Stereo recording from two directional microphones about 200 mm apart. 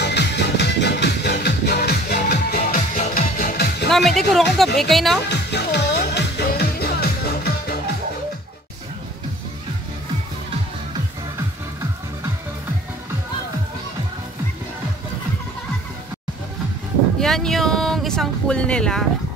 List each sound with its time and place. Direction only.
0.0 s music: 60° left (ahead or behind)
3.9 s speech: centre (ahead or behind)
5.3 s music: 55° left (ahead or behind)
17.2 s a sound: centre (ahead or behind)